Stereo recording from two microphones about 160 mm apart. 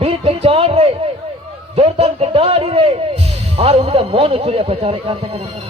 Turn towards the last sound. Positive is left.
turn(degrees=-35)  # may be behind; listen again after turning